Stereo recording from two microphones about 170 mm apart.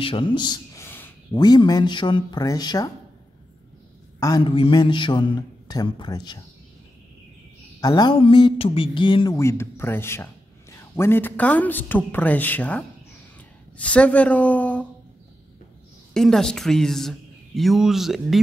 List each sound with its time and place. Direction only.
0.0 s speech: 30° left (ahead or behind)
0.8 s a sound: 10° left (ahead or behind)
1.3 s speech: 25° left (ahead or behind)
4.2 s speech: 25° left (ahead or behind)
7.8 s speech: 25° left (ahead or behind); by 14.9 s 10° left (ahead or behind)
16.1 s a man's voice: 5° left (ahead or behind)